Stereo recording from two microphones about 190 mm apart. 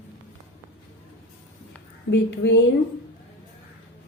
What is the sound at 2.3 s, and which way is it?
Female singing, 70° left (ahead or behind).